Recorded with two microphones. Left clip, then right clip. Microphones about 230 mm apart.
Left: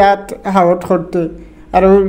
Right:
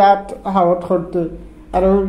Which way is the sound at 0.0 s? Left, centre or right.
Left.